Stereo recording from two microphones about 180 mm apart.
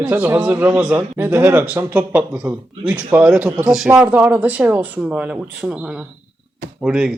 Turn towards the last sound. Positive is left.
turn(degrees=-5)  # may be behind; listen again after turning